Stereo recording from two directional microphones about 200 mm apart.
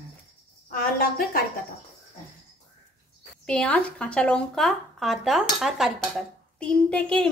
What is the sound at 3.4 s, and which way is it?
Speech, 5° left (ahead or behind).